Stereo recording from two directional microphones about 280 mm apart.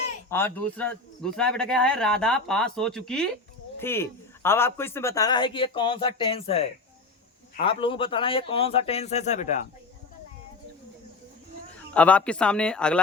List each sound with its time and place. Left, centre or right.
0.3 s a man's voice: centre; by 9.6 s left
11.9 s speech: centre